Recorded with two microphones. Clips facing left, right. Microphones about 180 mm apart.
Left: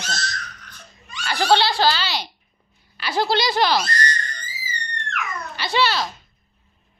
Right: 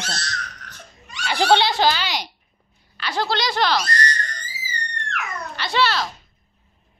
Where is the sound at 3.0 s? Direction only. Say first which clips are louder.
Left 3 dB; 10° left (ahead or behind).